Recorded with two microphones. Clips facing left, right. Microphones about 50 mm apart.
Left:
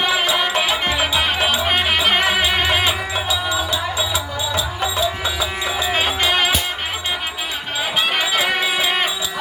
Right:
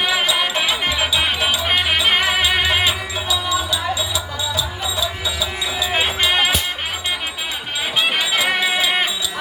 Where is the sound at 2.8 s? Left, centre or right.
Left.